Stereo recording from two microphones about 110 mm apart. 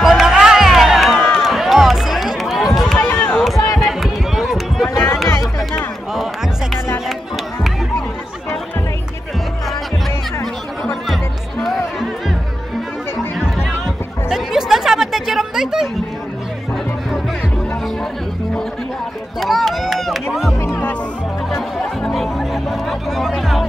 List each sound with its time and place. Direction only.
0.0 s music: 5° right (ahead or behind)
3.3 s a sound: centre (ahead or behind)
3.7 s run: centre (ahead or behind)
4.9 s music: 30° left (ahead or behind)
5.7 s music: centre (ahead or behind)
10.4 s music: centre (ahead or behind)
13.4 s music: 5° right (ahead or behind)
19.4 s music: centre (ahead or behind)
20.6 s music: 20° left (ahead or behind)
22.0 s music: centre (ahead or behind)